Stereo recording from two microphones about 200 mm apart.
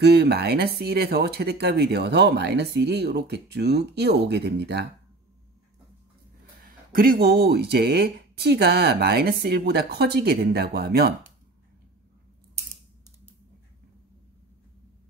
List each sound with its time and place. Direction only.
0.0 s speech: 55° right (ahead or behind)
6.6 s speech: 45° right (ahead or behind)